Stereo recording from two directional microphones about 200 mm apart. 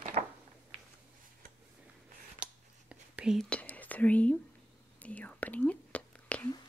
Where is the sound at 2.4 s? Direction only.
5° right (ahead or behind).